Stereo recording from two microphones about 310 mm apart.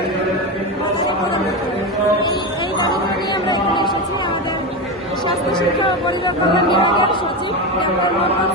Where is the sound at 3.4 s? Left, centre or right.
Centre.